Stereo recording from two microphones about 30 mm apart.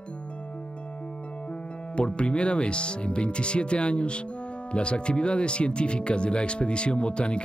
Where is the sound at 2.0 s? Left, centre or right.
Left.